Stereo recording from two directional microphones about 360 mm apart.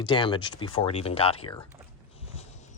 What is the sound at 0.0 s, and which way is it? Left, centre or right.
Speech, centre.